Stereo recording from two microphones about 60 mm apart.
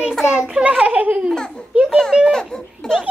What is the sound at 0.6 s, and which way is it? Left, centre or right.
Speech, right.